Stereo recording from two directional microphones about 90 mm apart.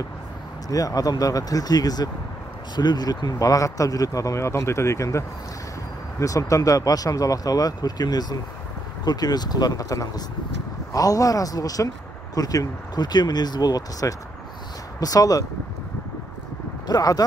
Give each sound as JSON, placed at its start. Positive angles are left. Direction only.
{"t": 0.7, "sound": "speech", "side_deg": 40}
{"t": 16.8, "sound": "speech", "side_deg": 45}